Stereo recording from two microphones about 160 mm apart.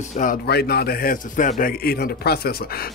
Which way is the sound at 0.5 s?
80° left.